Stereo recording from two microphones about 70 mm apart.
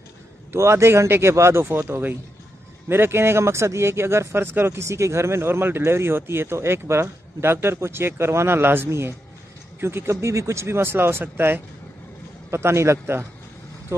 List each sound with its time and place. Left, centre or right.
0.5 s speech: right